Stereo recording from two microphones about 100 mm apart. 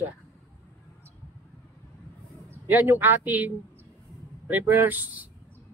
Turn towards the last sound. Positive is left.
turn(degrees=-15)  # may be behind; listen again after turning